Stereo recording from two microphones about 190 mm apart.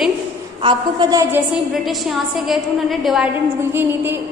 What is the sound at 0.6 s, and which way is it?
Speech, 20° right (ahead or behind).